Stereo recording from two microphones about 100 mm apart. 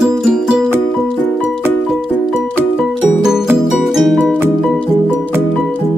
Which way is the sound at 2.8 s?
5° right (ahead or behind).